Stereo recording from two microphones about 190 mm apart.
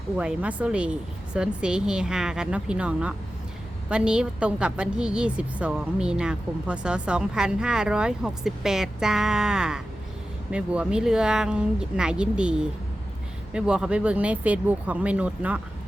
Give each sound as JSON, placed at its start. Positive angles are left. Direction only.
{"t": 0.2, "sound": "a woman's voice", "side_deg": -5}